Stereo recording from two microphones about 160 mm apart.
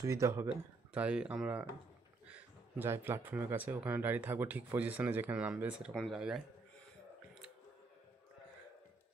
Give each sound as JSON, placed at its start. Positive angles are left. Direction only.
{"t": 0.0, "sound": "speech", "side_deg": -20}